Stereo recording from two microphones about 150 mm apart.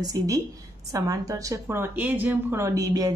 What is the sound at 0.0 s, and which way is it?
A woman's voice, 25° right (ahead or behind).